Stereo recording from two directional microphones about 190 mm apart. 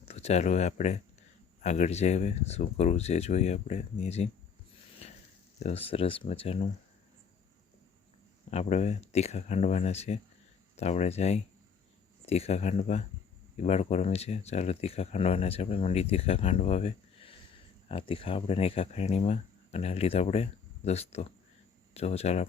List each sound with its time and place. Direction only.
0.0 s speech: 35° left (ahead or behind)
5.5 s speech: 35° left (ahead or behind)
8.4 s speech: 35° left (ahead or behind)